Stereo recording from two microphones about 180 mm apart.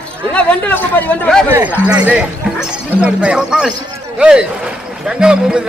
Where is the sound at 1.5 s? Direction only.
10° right (ahead or behind).